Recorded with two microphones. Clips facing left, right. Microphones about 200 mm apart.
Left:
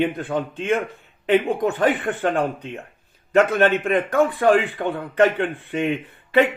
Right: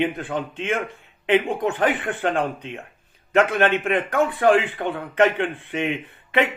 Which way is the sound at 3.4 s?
35° left (ahead or behind).